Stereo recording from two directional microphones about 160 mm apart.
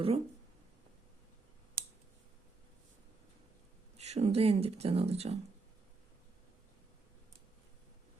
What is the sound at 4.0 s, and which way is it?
Speech, 45° right (ahead or behind).